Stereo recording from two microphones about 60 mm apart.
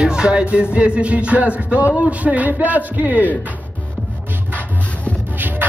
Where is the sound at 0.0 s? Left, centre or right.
Centre.